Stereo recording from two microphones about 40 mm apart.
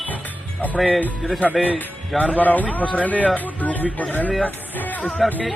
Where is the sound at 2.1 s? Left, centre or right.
Left.